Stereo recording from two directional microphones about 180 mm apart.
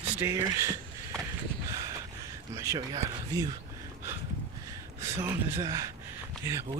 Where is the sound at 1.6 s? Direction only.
20° right (ahead or behind).